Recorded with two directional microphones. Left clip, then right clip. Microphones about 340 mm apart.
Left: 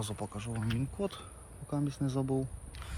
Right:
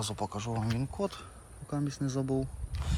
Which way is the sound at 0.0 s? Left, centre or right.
Centre.